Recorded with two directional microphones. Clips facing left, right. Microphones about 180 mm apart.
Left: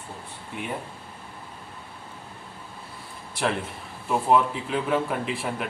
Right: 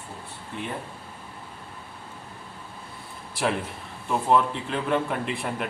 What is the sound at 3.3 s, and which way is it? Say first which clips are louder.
A man's voice: even; centre (ahead or behind).